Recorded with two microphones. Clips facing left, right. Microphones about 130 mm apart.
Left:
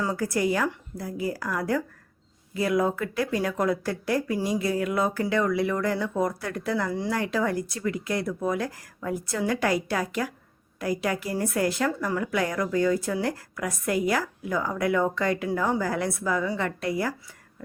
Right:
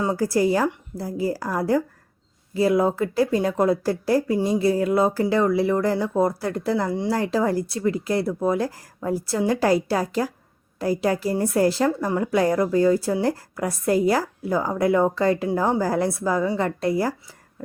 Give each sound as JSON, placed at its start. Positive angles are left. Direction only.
{"t": 0.0, "sound": "a woman's voice", "side_deg": -30}